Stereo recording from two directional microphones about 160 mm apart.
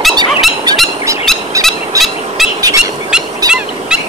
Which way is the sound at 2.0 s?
20° right (ahead or behind).